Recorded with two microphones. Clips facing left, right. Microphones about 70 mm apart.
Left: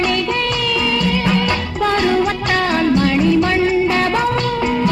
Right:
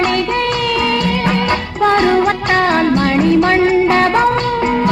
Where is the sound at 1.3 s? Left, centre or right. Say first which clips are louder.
Right 2 dB; right.